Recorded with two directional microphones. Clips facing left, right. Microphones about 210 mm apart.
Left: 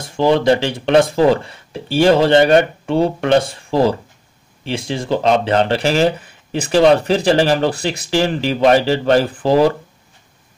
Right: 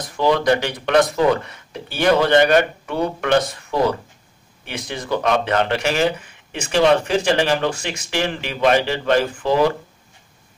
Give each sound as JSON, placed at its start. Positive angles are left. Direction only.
{"t": 0.0, "sound": "speech", "side_deg": 25}